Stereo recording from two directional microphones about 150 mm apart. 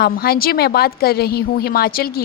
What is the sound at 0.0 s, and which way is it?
A woman's voice, 90° left.